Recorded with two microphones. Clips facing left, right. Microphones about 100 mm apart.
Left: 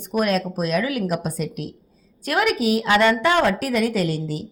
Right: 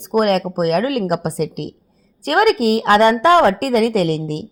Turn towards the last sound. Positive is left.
turn(degrees=-65)  # may be behind; listen again after turning